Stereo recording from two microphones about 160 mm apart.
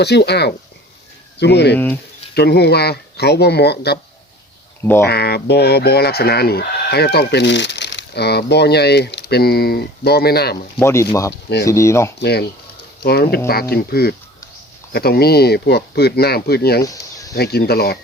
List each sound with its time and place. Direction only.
0.0 s speech: 90° left
4.8 s speech: 15° left (ahead or behind)
5.0 s speech: 85° left
10.8 s speech: 15° left (ahead or behind)
12.2 s speech: 90° left
13.5 s speech: 75° left (ahead or behind)
16.8 s a sound: 20° left (ahead or behind)
17.3 s speech: 80° left